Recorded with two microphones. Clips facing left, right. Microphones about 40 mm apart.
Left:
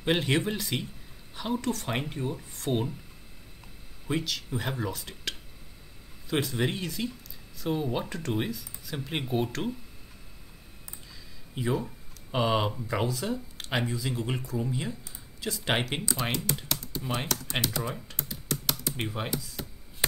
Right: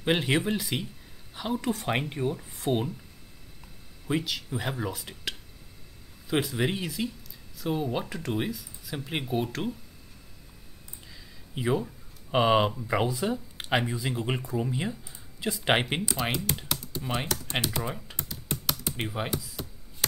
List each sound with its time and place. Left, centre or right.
0.0 s speech: centre
4.1 s speech: centre
11.5 s speech: centre
16.2 s speech: centre
18.9 s speech: centre